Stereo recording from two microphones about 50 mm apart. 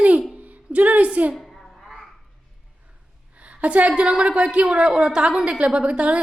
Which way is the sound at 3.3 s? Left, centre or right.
Right.